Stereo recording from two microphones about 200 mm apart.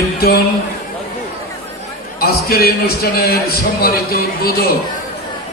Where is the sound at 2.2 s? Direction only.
50° left (ahead or behind).